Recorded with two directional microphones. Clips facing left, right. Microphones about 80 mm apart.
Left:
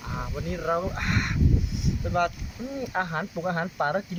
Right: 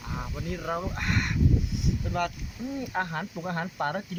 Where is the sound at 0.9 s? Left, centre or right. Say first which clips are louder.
Left 1 dB; left.